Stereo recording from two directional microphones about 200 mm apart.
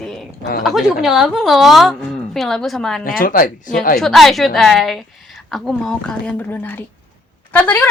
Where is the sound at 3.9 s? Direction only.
Centre (ahead or behind).